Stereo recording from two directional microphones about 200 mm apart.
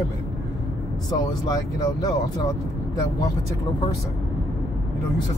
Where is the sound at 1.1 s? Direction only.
20° left (ahead or behind).